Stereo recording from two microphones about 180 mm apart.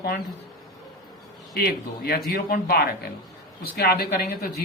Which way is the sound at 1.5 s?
60° left (ahead or behind).